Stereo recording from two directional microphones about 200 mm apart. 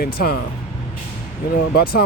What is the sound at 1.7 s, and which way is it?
Speech, 50° left (ahead or behind).